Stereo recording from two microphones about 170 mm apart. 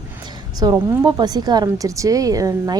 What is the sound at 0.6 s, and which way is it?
A woman's voice, 25° right (ahead or behind).